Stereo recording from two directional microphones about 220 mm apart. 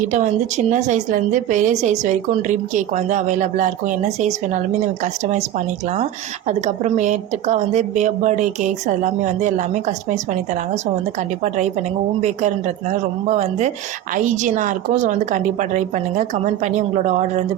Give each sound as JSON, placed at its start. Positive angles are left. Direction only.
{"t": 0.0, "sound": "a woman's voice", "side_deg": -35}
{"t": 12.2, "sound": "a woman's voice", "side_deg": -30}